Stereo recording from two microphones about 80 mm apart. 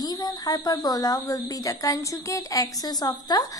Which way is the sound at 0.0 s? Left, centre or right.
Left.